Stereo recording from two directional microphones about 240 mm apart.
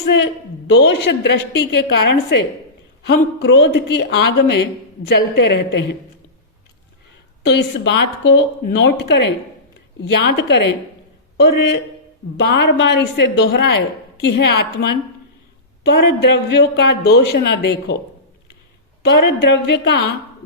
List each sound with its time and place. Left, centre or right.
0.7 s speech: left
7.4 s speech: left
12.4 s speech: left
19.0 s speech: left